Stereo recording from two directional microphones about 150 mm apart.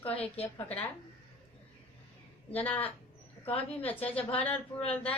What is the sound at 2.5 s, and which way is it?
A woman's voice, 10° left (ahead or behind).